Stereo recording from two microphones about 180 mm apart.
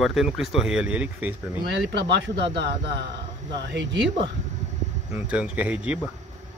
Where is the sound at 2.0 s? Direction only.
75° right (ahead or behind).